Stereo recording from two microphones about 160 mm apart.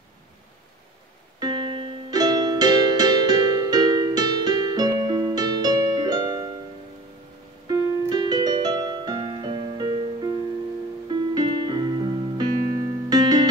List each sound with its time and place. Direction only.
1.4 s music: 30° right (ahead or behind)
7.6 s music: 25° right (ahead or behind)